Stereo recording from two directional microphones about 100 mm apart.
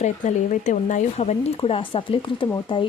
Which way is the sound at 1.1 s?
90° left.